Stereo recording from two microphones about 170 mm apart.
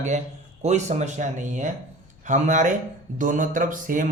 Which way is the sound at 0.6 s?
40° right (ahead or behind).